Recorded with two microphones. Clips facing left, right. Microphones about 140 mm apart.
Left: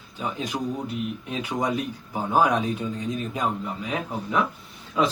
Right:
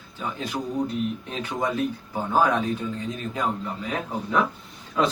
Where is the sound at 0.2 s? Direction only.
15° left (ahead or behind).